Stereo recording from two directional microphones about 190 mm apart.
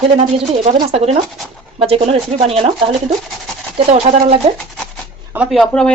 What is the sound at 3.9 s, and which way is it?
Speech, 35° right (ahead or behind).